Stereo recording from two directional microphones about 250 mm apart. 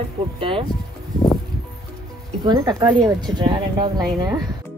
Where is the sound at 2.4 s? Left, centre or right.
Centre.